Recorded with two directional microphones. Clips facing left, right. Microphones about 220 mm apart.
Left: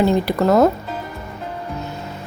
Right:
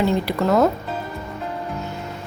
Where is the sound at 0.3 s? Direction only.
40° left (ahead or behind).